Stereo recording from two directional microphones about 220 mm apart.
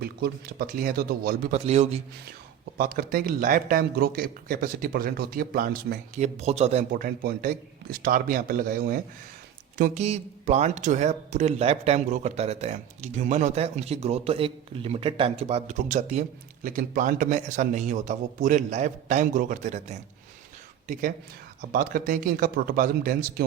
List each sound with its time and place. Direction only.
0.0 s speech: 45° right (ahead or behind)
2.7 s speech: 40° right (ahead or behind)